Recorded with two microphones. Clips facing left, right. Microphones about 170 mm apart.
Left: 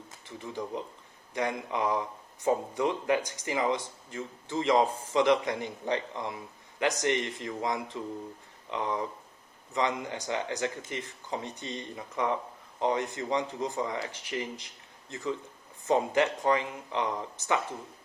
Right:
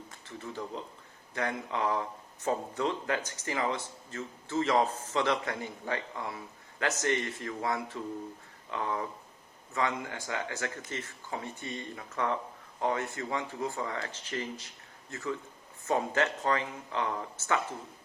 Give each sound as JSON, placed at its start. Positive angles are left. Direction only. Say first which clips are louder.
{"t": 0.3, "sound": "speech", "louder": "left 3 dB", "side_deg": 15}